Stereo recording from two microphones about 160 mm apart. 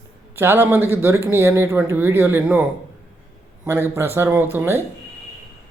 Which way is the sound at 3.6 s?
15° right (ahead or behind).